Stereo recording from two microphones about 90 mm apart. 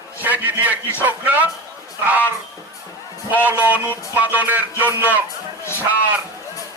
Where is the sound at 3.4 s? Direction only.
20° right (ahead or behind).